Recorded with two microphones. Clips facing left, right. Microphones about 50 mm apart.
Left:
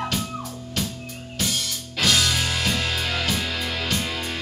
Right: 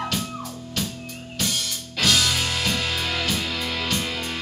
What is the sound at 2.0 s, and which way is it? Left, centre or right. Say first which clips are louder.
Music: even; centre.